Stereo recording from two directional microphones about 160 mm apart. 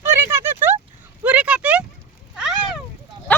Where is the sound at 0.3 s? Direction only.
15° right (ahead or behind).